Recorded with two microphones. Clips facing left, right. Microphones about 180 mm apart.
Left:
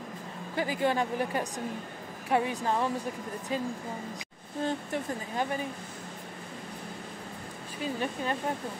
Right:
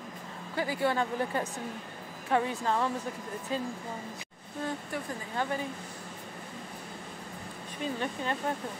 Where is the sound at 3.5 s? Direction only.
15° left (ahead or behind).